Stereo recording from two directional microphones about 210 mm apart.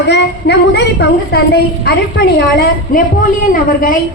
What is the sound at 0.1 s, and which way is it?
A woman's voice, 55° left (ahead or behind).